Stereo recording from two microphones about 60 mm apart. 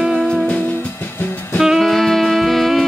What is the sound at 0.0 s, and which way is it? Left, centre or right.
Music, centre.